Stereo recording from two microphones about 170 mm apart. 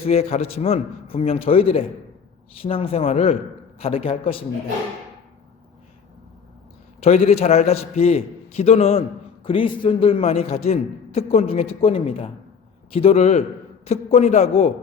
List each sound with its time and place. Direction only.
0.0 s a man's voice: 35° left (ahead or behind)
7.0 s a man's voice: 40° left (ahead or behind)